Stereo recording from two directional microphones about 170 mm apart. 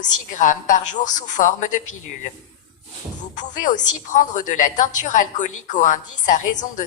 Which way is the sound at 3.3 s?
45° left (ahead or behind).